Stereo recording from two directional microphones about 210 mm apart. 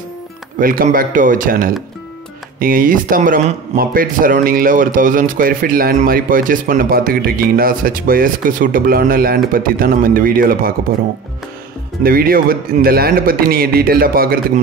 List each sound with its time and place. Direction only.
0.6 s speech: 40° right (ahead or behind)
12.0 s speech: 45° right (ahead or behind)